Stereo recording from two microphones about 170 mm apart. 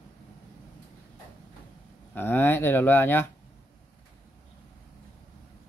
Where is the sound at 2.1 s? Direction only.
10° left (ahead or behind).